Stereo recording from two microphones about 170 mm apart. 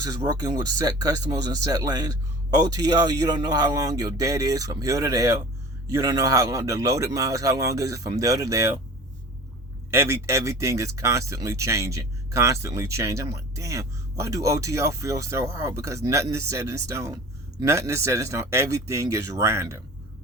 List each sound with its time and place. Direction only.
0.3 s speech: 20° right (ahead or behind)
9.9 s speech: 15° right (ahead or behind)